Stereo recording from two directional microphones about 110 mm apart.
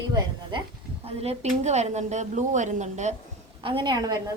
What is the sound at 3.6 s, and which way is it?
Speech, 50° right (ahead or behind).